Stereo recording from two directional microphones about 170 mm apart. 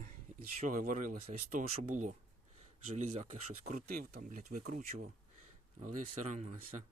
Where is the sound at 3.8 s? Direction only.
60° right (ahead or behind); by 6.5 s 40° right (ahead or behind).